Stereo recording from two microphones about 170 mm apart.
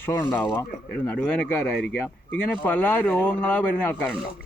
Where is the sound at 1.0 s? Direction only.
5° left (ahead or behind).